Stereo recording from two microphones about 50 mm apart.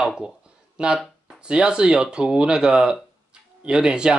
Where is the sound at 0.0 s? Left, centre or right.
Centre.